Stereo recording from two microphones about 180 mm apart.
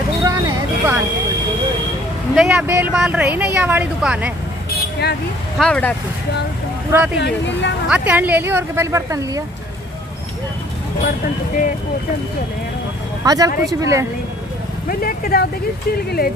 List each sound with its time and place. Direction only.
0.2 s vehicle: 20° right (ahead or behind)
2.3 s speech: 5° right (ahead or behind)
5.6 s speech: 5° left (ahead or behind)
7.2 s speech: 75° left (ahead or behind)
7.9 s speech: 10° right (ahead or behind)
11.1 s speech: 50° left (ahead or behind)
13.2 s speech: 20° right (ahead or behind)
14.9 s speech: 55° left (ahead or behind)